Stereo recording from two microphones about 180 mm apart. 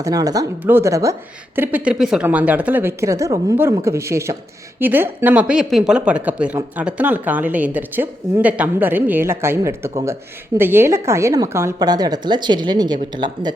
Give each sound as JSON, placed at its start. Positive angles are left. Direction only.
{"t": 0.0, "sound": "a woman's voice", "side_deg": -20}